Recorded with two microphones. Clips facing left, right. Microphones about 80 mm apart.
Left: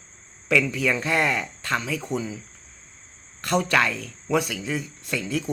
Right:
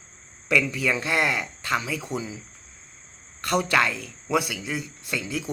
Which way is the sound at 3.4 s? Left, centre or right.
Centre.